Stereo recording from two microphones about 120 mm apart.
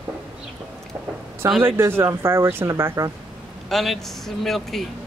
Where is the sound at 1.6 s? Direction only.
20° right (ahead or behind).